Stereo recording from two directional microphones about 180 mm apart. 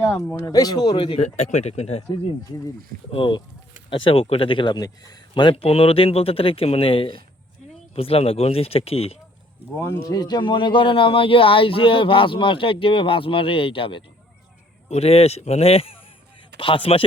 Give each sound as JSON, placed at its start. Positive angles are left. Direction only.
{"t": 0.1, "sound": "a man's voice", "side_deg": 15}
{"t": 3.1, "sound": "a man's voice", "side_deg": 30}
{"t": 9.7, "sound": "a man's voice", "side_deg": 15}